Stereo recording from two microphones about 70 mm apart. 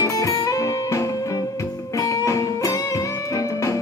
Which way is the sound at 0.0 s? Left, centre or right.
Left.